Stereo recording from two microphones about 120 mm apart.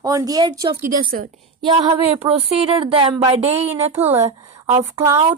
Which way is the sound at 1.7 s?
50° right (ahead or behind).